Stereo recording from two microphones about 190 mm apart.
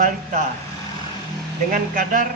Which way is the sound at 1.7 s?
45° right (ahead or behind).